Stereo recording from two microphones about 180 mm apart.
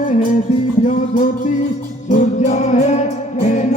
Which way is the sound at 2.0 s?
45° left (ahead or behind).